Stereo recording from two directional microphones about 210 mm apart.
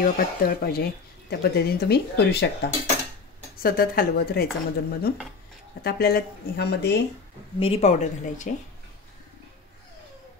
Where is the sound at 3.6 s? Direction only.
45° left (ahead or behind).